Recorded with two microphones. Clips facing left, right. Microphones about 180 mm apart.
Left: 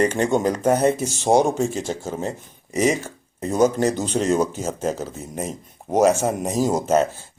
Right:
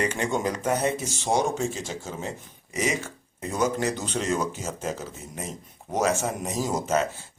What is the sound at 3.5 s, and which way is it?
Speech, 40° left (ahead or behind).